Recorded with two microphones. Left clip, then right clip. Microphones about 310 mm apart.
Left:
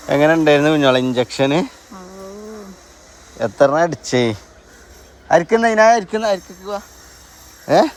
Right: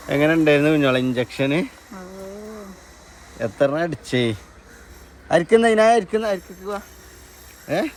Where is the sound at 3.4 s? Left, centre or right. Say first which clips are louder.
Left 6 dB; centre.